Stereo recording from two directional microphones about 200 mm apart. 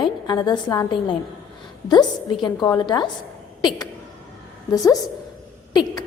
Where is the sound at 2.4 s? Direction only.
20° left (ahead or behind).